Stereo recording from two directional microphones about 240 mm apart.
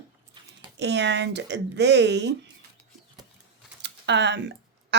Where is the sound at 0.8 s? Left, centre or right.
Right.